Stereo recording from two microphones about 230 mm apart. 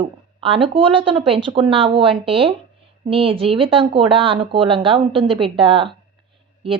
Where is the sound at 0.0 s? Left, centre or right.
Right.